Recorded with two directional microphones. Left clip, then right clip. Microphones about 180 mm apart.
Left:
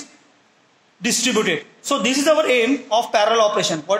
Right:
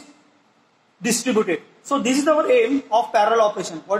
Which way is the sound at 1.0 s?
35° left (ahead or behind).